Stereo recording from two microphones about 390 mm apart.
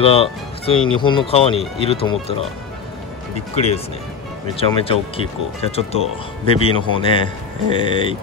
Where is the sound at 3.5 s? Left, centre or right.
Centre.